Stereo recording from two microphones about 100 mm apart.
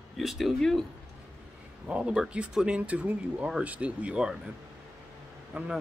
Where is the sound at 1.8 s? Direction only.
10° right (ahead or behind).